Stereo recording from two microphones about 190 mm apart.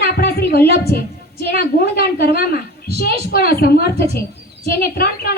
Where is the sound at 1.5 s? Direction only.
60° left (ahead or behind).